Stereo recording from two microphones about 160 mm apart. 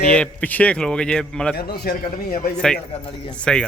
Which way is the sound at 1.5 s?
75° left (ahead or behind).